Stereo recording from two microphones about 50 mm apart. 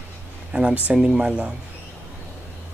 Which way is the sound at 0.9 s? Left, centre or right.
Centre.